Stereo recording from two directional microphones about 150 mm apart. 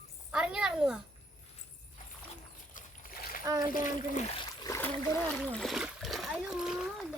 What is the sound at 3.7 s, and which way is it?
Speech, 60° left (ahead or behind).